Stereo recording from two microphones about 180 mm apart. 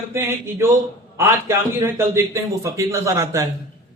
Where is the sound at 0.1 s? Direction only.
15° right (ahead or behind).